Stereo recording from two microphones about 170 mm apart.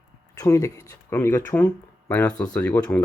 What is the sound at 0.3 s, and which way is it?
Speech, 20° left (ahead or behind).